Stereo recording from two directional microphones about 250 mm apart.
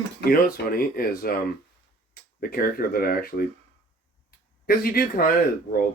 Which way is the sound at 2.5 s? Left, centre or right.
Left.